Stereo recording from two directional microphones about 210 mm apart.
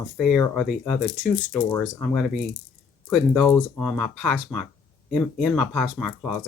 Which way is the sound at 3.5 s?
5° left (ahead or behind).